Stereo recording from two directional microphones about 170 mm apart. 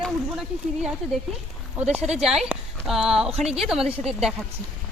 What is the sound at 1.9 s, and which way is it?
Speech, 5° right (ahead or behind).